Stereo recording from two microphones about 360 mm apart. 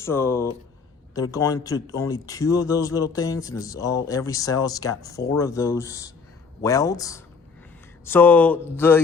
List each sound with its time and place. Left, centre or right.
0.0 s speech: centre